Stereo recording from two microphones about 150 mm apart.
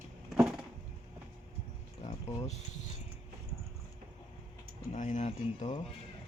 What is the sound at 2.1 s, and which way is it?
Speech, 45° left (ahead or behind).